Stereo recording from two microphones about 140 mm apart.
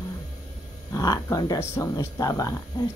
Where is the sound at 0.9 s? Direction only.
25° left (ahead or behind).